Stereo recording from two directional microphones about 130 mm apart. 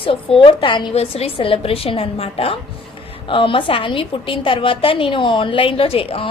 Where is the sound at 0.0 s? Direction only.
45° left (ahead or behind).